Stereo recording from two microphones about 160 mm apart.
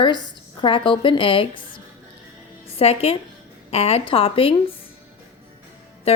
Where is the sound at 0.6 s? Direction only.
30° left (ahead or behind).